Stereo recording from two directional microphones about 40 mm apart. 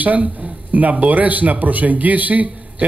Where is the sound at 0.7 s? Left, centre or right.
Right.